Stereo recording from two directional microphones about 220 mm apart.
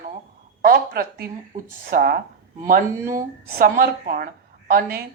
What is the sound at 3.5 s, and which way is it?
Speech, 40° right (ahead or behind).